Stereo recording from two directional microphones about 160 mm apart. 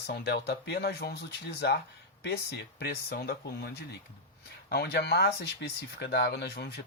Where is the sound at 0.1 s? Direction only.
90° left.